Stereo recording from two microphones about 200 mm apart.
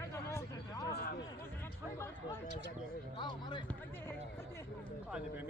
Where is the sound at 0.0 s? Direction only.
15° left (ahead or behind).